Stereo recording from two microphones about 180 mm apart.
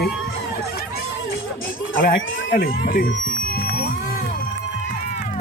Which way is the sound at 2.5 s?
55° left (ahead or behind).